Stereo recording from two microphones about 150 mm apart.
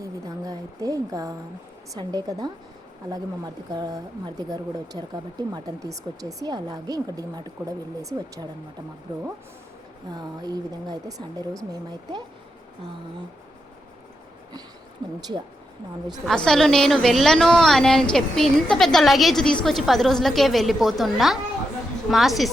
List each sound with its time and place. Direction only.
0.0 s a sound: 25° right (ahead or behind)
1.9 s speech: 25° right (ahead or behind)
10.1 s speech: 25° right (ahead or behind)
15.0 s speech: 25° right (ahead or behind)
16.2 s a woman's voice: 5° left (ahead or behind)